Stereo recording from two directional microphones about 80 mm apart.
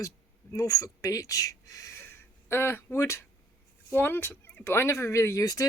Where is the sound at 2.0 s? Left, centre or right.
Left.